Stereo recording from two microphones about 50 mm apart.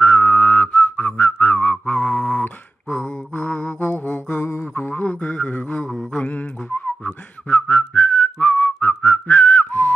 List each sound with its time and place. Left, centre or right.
0.0 s whistling: left
2.4 s a sound: left
3.3 s mantra: left
3.9 s mantra: left
5.0 s music: left
6.1 s whistling: left